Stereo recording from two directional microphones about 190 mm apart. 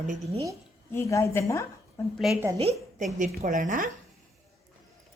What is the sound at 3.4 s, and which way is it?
Speech, 45° right (ahead or behind).